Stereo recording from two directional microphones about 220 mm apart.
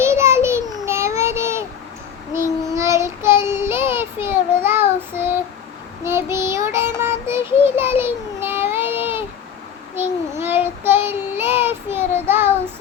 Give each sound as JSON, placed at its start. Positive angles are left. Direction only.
{"t": 0.0, "sound": "child singing", "side_deg": -10}